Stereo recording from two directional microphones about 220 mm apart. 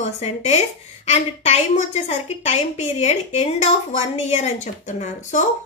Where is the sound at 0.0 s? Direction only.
30° left (ahead or behind).